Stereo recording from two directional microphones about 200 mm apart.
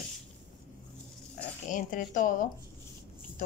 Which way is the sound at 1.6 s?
40° left (ahead or behind).